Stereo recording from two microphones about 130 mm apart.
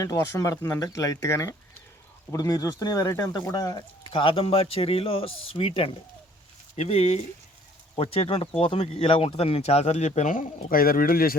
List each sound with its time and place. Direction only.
0.0 s speech: 25° left (ahead or behind)
4.1 s speech: 45° left (ahead or behind); by 11.2 s 90° left